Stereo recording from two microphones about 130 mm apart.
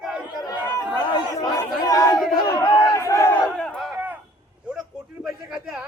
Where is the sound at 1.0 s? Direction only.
35° left (ahead or behind).